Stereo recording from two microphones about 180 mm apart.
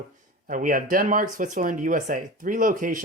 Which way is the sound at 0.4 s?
50° right (ahead or behind).